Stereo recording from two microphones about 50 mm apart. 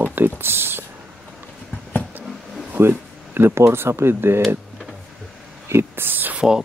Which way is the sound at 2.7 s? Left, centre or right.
Right.